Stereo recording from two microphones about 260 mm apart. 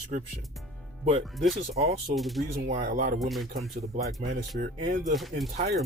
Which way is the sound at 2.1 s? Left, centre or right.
Centre.